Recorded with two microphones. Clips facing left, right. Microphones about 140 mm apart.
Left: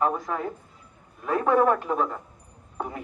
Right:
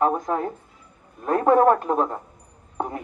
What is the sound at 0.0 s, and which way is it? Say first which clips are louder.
A man's voice: right 4 dB; 40° right (ahead or behind).